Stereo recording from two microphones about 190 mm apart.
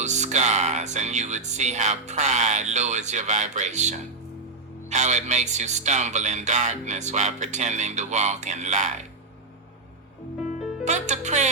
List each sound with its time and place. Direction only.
0.0 s speech: 40° right (ahead or behind)
10.8 s speech: 40° right (ahead or behind)